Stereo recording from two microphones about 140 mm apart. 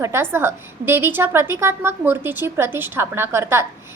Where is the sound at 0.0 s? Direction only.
15° right (ahead or behind).